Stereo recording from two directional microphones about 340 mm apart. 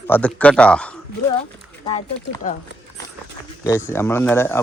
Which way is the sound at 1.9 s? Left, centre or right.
Centre.